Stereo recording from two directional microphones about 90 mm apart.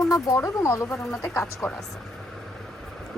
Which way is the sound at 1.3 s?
20° left (ahead or behind).